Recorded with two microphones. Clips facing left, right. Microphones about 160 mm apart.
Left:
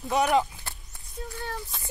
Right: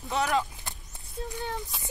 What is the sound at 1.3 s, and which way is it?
Speech, 20° right (ahead or behind).